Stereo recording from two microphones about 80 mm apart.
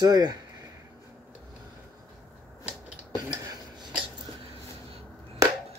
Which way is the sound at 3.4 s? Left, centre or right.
Right.